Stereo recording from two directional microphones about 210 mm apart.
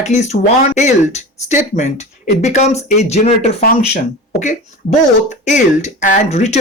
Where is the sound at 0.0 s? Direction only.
35° left (ahead or behind).